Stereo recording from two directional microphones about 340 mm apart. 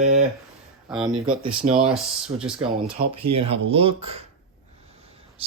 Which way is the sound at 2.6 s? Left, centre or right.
Centre.